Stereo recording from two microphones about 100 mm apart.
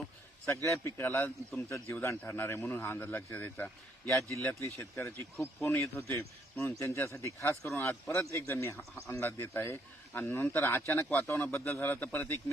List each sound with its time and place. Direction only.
0.4 s speech: 25° left (ahead or behind)
1.5 s speech: 5° left (ahead or behind)
1.9 s speech: 25° left (ahead or behind)